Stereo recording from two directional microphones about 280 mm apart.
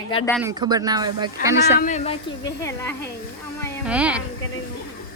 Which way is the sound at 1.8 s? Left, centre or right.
Left.